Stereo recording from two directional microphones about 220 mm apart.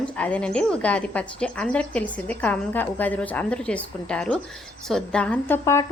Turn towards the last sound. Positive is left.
turn(degrees=15)  # may be behind; listen again after turning